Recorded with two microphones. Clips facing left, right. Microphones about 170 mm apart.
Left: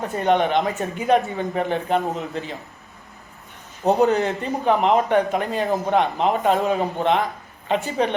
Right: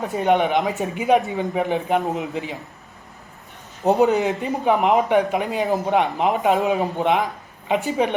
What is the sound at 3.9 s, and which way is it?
Speech, 15° right (ahead or behind).